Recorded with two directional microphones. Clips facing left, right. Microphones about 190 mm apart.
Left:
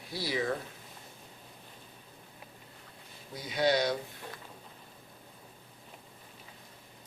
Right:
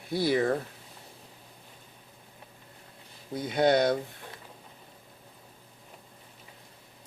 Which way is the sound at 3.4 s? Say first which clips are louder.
Right 5 dB; 55° right (ahead or behind).